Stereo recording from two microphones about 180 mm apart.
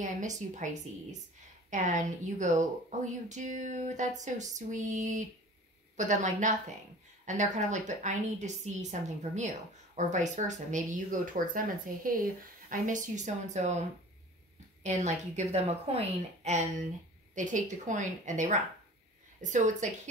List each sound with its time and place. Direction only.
0.0 s a woman's voice: 45° right (ahead or behind)
1.7 s a woman's voice: 45° right (ahead or behind)
9.9 s a woman's voice: 40° right (ahead or behind)